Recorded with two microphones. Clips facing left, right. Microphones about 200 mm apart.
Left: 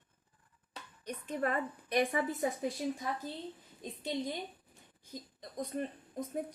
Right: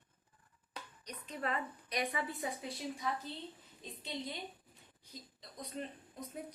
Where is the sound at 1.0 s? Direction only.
50° left (ahead or behind).